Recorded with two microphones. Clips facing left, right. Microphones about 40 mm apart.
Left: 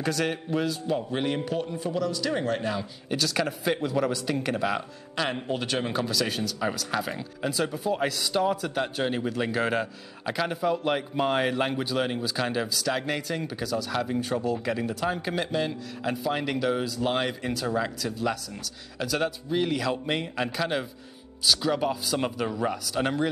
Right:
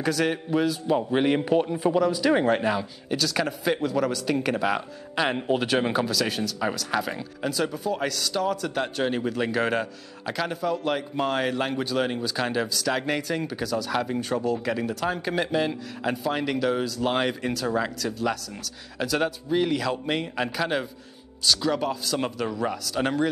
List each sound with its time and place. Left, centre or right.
0.0 s a man's voice: centre
0.9 s speech: centre
3.1 s a man's voice: centre
4.3 s speech: centre
6.0 s a man's voice: centre
8.6 s a man's voice: centre